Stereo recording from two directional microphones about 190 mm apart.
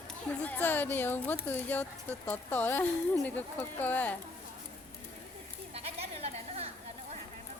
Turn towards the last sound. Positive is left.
turn(degrees=-30)  # may be behind; listen again after turning